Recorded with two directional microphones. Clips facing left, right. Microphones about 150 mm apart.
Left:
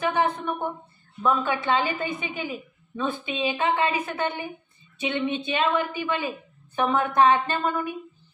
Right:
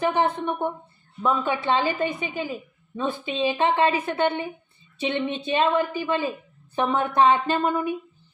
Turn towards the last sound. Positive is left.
turn(degrees=-25)  # may be behind; listen again after turning